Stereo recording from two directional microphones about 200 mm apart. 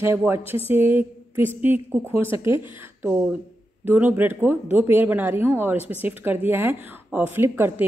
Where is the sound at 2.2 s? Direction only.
25° left (ahead or behind).